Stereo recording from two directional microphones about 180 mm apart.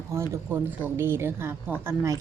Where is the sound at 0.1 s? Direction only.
15° right (ahead or behind).